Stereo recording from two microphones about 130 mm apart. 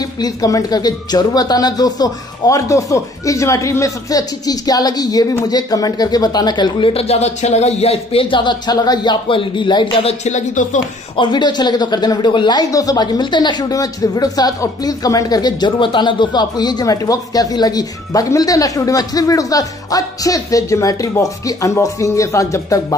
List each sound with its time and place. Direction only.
0.0 s speech: 30° left (ahead or behind)
10.2 s speech: 70° left (ahead or behind)
11.1 s speech: 35° left (ahead or behind)